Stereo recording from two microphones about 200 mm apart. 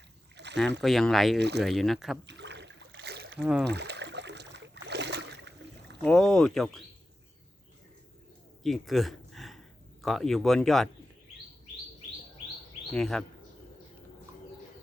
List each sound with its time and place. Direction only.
0.3 s rowboat: 60° right (ahead or behind)
0.8 s speech: centre (ahead or behind)
1.4 s speech: 55° right (ahead or behind)
1.6 s speech: centre (ahead or behind)
2.2 s a sound: 60° right (ahead or behind)
3.3 s speech: 5° right (ahead or behind)
3.7 s a sound: 55° right (ahead or behind)
6.0 s speech: centre (ahead or behind)
8.6 s a sound: centre (ahead or behind)
10.0 s speech: centre (ahead or behind)
12.9 s speech: centre (ahead or behind)